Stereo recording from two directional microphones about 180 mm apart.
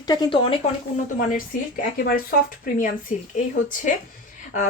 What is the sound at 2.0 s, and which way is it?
Speech, 55° left (ahead or behind).